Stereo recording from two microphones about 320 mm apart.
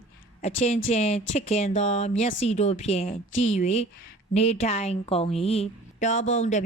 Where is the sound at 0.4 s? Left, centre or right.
Centre.